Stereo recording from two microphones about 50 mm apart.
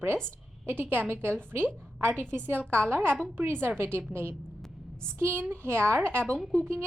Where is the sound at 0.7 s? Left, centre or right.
Right.